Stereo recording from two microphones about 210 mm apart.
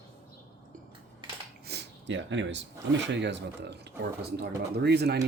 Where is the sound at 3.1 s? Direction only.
55° right (ahead or behind).